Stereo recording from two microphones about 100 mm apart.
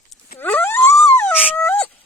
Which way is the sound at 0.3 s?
20° left (ahead or behind).